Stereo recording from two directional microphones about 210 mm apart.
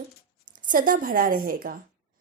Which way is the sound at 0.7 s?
40° right (ahead or behind).